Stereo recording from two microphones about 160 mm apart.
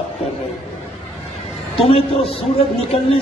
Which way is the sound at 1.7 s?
35° left (ahead or behind).